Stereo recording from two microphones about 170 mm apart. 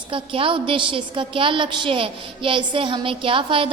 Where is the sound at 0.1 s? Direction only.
30° right (ahead or behind).